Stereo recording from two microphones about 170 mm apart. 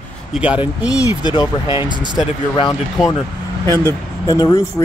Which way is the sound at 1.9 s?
25° right (ahead or behind).